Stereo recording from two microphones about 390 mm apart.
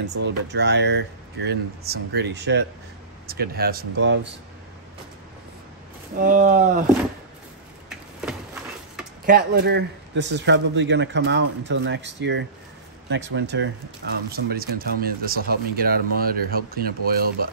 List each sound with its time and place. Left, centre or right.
0.1 s speech: right
6.1 s speech: centre
9.2 s speech: right